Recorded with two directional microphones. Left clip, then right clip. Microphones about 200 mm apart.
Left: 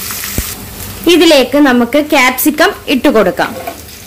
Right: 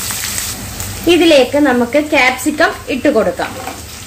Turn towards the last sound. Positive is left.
turn(degrees=55)  # may be behind; listen again after turning